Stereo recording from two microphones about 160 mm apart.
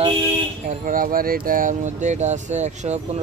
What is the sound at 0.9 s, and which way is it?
Speech, 60° right (ahead or behind).